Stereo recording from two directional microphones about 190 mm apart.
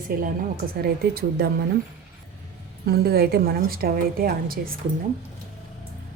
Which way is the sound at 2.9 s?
55° right (ahead or behind).